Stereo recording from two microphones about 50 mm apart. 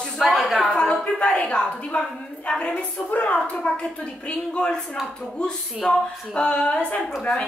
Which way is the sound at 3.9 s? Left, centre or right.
Left.